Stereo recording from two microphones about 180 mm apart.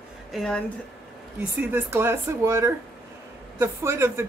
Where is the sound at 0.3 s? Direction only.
5° left (ahead or behind).